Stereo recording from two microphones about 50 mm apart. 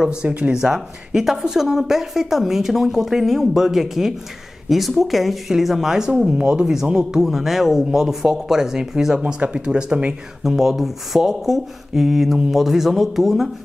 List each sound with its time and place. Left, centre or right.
0.0 s a woman's voice: centre
9.2 s speech: right
10.4 s speech: centre